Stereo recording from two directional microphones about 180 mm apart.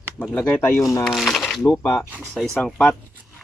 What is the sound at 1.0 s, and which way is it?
Speech, centre (ahead or behind).